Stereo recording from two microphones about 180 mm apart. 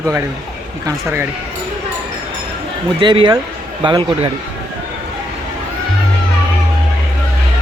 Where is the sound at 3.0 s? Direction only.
25° right (ahead or behind).